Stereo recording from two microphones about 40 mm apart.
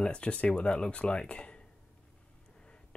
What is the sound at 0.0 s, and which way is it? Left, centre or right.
Speech, left.